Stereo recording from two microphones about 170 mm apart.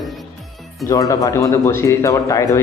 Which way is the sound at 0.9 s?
20° left (ahead or behind).